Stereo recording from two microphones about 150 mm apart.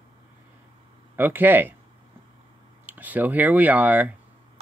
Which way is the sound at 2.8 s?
10° right (ahead or behind).